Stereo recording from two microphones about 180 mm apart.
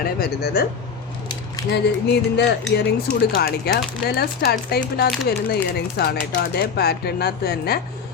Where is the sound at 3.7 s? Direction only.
60° left (ahead or behind).